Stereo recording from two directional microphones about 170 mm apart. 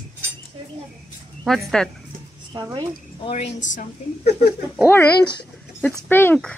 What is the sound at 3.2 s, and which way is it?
Speech, 40° left (ahead or behind).